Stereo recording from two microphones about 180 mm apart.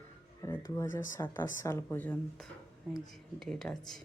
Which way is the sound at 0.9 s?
15° left (ahead or behind).